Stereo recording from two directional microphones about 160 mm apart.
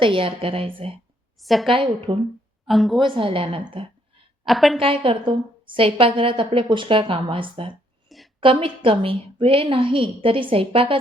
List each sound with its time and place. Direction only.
0.0 s a woman's voice: 35° right (ahead or behind)
1.4 s a woman's voice: centre (ahead or behind)
1.6 s a woman's voice: 35° right (ahead or behind)
2.6 s a woman's voice: centre (ahead or behind)
3.2 s a woman's voice: 35° right (ahead or behind)
4.4 s a woman's voice: centre (ahead or behind)
4.8 s a woman's voice: 35° right (ahead or behind)